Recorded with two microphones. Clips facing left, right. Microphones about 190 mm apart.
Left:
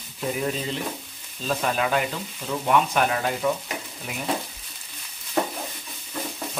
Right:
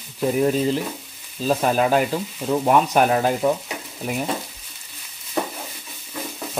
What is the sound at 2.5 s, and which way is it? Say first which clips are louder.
Speech: right 4 dB; 40° right (ahead or behind).